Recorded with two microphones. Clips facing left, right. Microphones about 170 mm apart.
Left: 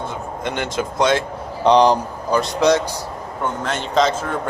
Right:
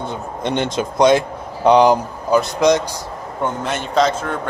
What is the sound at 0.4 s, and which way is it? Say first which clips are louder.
Speech: right 4 dB; 20° right (ahead or behind).